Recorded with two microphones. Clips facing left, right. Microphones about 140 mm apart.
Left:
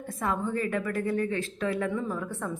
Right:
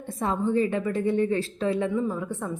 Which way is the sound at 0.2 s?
25° right (ahead or behind).